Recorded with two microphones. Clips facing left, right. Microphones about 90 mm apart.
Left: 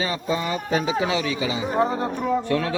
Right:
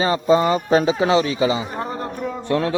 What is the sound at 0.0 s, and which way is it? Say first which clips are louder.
A man's voice: right 9 dB; 40° right (ahead or behind).